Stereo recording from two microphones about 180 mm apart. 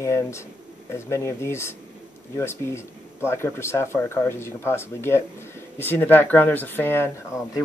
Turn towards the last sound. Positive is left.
turn(degrees=15)  # may be behind; listen again after turning